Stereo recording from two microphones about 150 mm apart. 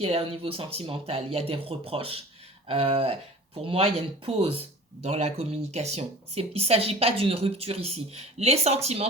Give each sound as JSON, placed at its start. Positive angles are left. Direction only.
{"t": 0.0, "sound": "speech", "side_deg": -40}